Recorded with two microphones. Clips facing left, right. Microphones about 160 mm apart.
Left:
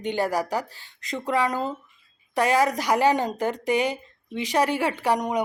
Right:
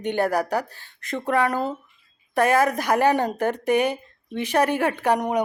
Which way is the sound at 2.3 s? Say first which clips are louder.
Right 2 dB; 55° right (ahead or behind).